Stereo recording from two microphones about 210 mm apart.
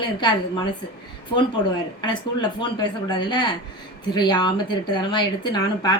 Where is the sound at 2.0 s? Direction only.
20° left (ahead or behind).